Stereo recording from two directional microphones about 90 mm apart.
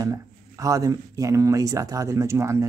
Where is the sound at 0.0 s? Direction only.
35° right (ahead or behind).